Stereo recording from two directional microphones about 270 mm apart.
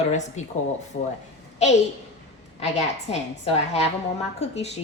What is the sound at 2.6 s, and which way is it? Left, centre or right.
A woman's voice, left.